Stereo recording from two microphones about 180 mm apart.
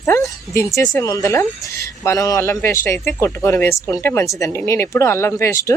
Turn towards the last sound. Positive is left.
turn(degrees=15)  # may be behind; listen again after turning